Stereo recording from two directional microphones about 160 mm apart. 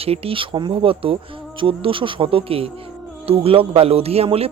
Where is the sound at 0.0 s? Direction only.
40° right (ahead or behind).